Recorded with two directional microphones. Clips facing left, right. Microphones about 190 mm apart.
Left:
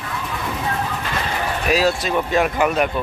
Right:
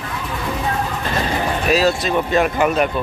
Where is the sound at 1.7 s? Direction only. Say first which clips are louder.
Right 1 dB; 10° left (ahead or behind).